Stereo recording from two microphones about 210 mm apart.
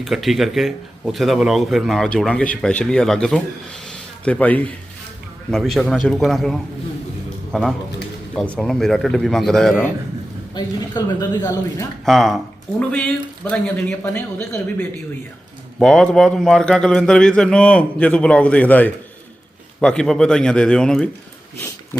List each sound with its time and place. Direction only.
0.0 s speech: centre (ahead or behind)
10.5 s a woman's voice: 20° left (ahead or behind)
12.0 s speech: centre (ahead or behind)